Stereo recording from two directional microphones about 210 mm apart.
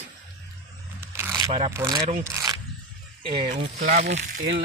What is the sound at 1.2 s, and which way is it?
Crackle, 10° right (ahead or behind).